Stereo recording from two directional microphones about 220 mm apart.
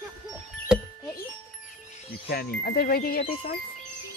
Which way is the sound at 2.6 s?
45° left (ahead or behind).